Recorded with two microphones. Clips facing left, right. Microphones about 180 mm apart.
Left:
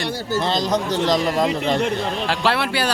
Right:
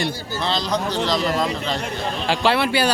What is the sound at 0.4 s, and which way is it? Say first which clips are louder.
A man's voice: even; 45° left (ahead or behind).